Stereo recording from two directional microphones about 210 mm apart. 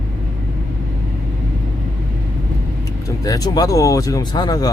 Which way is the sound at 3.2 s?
15° left (ahead or behind).